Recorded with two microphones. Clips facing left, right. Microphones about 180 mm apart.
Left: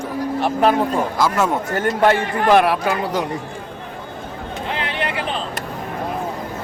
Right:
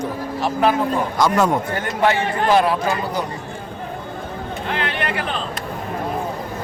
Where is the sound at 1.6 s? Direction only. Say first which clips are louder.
Left 3 dB; 45° left (ahead or behind); by 3.2 s 70° left (ahead or behind).